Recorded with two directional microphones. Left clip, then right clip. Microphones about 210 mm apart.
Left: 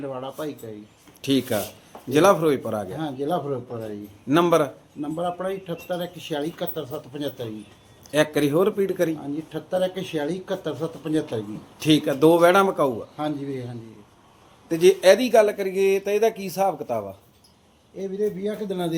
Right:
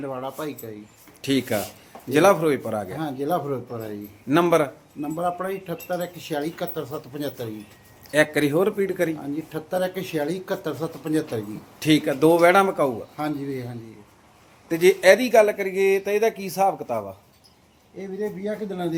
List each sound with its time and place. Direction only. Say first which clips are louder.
0.0 s speech: right 1 dB; 10° right (ahead or behind)
1.2 s speech: even; 5° left (ahead or behind)
2.9 s speech: right 2 dB; 10° right (ahead or behind)
4.3 s speech: even; 5° left (ahead or behind)
4.9 s speech: right 1 dB; 10° right (ahead or behind)
8.1 s speech: right 1 dB; 5° left (ahead or behind)
9.2 s speech: right 1 dB; 10° right (ahead or behind)
11.8 s speech: left 1 dB; 5° left (ahead or behind)
13.1 s speech: even; 10° right (ahead or behind)
14.7 s speech: even; centre (ahead or behind)
18.2 s speech: left 2 dB; 45° left (ahead or behind)